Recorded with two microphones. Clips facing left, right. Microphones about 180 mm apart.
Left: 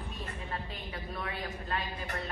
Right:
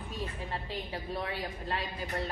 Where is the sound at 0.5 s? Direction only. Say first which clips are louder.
Right 3 dB; 30° right (ahead or behind).